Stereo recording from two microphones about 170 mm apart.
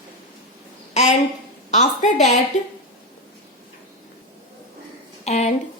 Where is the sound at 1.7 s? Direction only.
45° left (ahead or behind).